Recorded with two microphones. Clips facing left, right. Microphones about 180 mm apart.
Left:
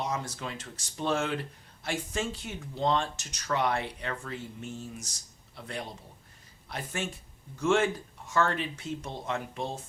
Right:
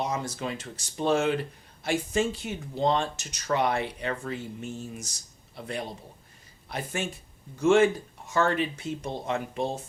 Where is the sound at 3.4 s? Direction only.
20° right (ahead or behind).